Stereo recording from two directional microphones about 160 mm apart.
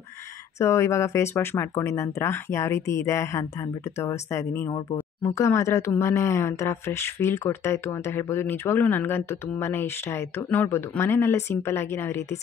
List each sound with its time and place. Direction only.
0.6 s speech: 15° left (ahead or behind)